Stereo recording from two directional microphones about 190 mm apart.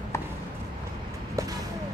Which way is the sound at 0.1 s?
15° left (ahead or behind).